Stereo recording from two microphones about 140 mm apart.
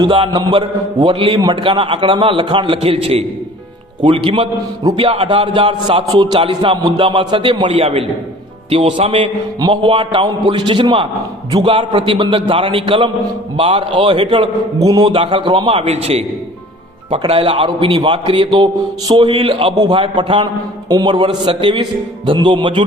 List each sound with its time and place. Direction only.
0.0 s a man's voice: 40° right (ahead or behind)
4.3 s a man's voice: 30° right (ahead or behind)
5.0 s a man's voice: 45° right (ahead or behind)
14.8 s mantra: 25° right (ahead or behind)
15.1 s a man's voice: 40° right (ahead or behind)